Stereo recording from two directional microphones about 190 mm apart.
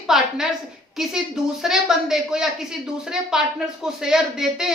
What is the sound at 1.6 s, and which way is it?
Speech, centre (ahead or behind).